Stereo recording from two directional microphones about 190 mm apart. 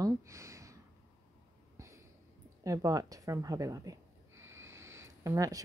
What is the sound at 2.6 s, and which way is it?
Speech, 15° right (ahead or behind).